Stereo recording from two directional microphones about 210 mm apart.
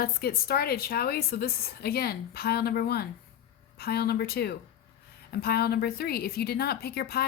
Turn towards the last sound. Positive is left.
turn(degrees=50)  # may be behind; listen again after turning